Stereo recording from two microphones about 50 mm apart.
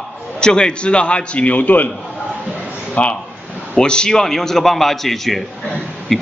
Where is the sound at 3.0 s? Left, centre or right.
Left.